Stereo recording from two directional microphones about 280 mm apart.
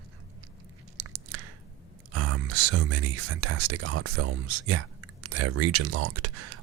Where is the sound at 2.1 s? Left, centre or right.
Right.